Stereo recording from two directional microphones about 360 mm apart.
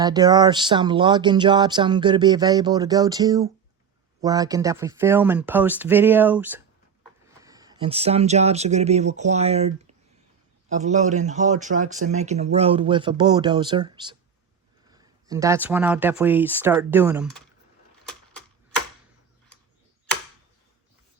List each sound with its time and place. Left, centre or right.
0.0 s speech: centre